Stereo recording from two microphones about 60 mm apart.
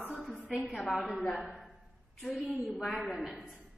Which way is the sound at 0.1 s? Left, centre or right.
Centre.